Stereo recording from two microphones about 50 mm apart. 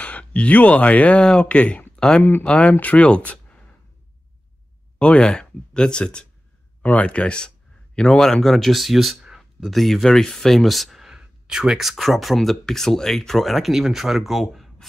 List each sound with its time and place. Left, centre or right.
0.0 s speech: left
4.9 s speech: left
6.8 s speech: left; by 11.1 s centre
11.1 s a sound: centre
11.8 s speech: centre